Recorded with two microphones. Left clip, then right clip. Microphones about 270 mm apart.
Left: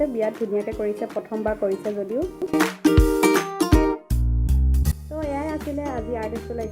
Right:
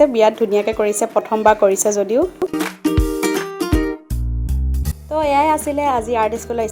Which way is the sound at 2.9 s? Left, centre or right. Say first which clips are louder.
Left 1 dB; centre.